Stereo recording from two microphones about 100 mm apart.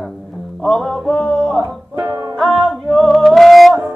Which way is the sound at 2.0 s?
30° right (ahead or behind).